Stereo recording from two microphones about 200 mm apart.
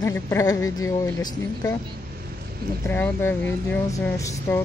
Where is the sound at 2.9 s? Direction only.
10° left (ahead or behind).